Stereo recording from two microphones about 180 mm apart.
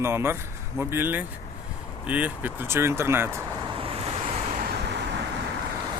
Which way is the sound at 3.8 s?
30° right (ahead or behind).